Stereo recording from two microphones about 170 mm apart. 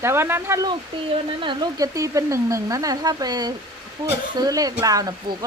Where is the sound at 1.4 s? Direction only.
25° right (ahead or behind).